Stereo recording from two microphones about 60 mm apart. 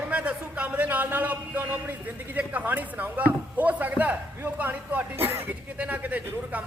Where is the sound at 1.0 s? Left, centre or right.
Right.